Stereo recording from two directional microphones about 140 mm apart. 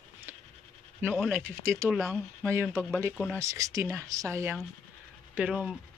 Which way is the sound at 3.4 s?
20° right (ahead or behind).